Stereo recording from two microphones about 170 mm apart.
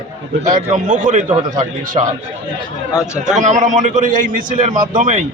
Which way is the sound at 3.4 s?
45° right (ahead or behind).